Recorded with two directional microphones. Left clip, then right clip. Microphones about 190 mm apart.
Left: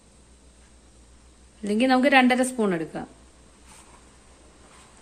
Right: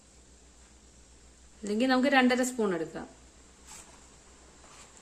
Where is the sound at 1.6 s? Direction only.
15° left (ahead or behind).